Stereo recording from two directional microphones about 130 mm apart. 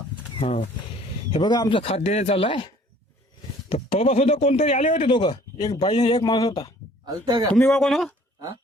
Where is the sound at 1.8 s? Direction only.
55° left (ahead or behind).